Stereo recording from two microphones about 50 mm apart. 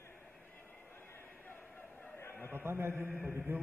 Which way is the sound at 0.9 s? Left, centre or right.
Left.